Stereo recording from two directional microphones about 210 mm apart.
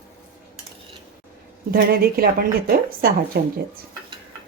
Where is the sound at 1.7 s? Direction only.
45° right (ahead or behind).